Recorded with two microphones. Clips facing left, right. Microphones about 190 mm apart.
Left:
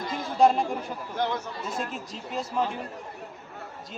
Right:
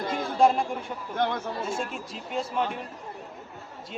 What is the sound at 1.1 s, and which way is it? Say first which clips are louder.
Speech: right 1 dB; 55° right (ahead or behind).